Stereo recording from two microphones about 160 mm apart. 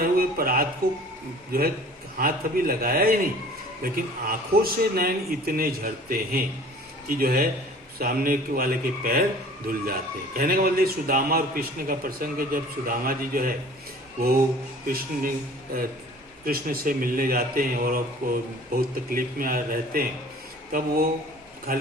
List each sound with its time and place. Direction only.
0.0 s a sound: 65° right (ahead or behind)
2.1 s a man's voice: 65° right (ahead or behind)
14.8 s a man's voice: 65° right (ahead or behind)